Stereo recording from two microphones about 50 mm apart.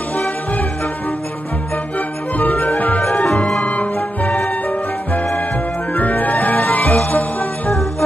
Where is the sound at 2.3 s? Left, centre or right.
Left.